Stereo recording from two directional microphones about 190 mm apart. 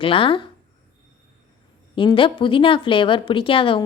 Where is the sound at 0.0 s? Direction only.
30° left (ahead or behind).